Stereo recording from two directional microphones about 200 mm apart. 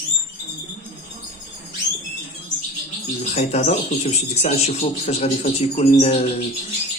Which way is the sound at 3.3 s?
35° left (ahead or behind).